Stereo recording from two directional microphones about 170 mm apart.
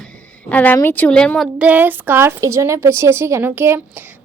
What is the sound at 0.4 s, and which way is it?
Speech, 10° left (ahead or behind).